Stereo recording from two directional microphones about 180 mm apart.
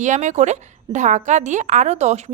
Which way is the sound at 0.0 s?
40° right (ahead or behind).